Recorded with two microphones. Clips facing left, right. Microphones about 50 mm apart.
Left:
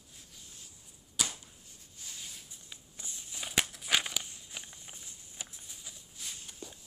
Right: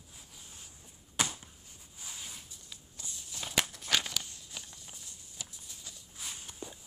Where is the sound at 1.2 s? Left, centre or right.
Right.